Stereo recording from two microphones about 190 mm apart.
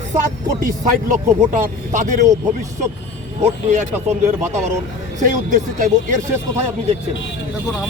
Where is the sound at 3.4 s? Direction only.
40° right (ahead or behind).